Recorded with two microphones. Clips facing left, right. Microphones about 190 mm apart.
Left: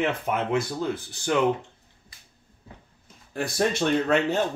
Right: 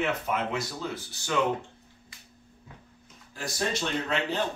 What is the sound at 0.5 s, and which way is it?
Speech, 50° left (ahead or behind).